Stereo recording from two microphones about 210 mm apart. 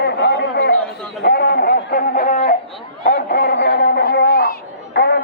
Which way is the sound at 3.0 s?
45° left (ahead or behind).